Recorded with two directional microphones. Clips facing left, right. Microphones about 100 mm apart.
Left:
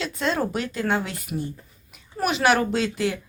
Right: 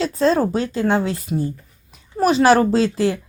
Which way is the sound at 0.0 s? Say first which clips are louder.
Right 8 dB; 35° right (ahead or behind).